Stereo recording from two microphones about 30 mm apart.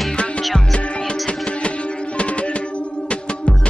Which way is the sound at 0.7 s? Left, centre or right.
Left.